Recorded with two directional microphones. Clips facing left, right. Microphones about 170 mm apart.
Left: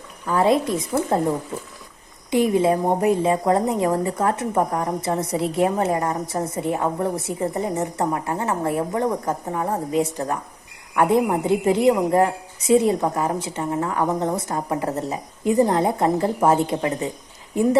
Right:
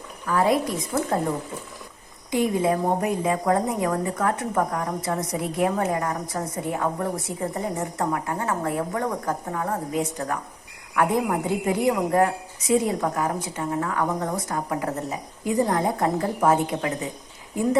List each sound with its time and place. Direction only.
0.3 s a woman's voice: 25° left (ahead or behind)
0.9 s speech: 15° left (ahead or behind)
2.3 s a woman's voice: 25° left (ahead or behind)